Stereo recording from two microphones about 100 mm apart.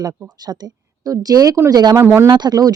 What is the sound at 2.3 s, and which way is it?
Speech, 45° right (ahead or behind).